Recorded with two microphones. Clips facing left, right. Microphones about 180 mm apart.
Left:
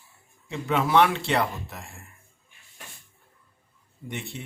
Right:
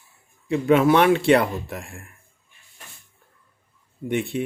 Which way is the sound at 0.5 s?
55° right (ahead or behind).